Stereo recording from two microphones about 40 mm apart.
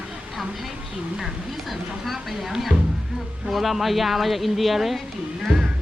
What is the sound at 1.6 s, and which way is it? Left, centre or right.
Speech, centre.